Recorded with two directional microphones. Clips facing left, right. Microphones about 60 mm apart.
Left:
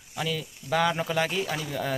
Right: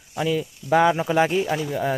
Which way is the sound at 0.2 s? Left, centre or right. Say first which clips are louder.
Right 7 dB; centre.